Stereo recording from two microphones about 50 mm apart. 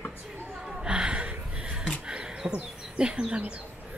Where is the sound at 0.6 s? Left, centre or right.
Centre.